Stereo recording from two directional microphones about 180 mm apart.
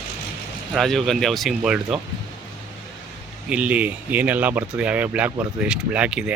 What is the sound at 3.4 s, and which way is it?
Speech, 5° right (ahead or behind).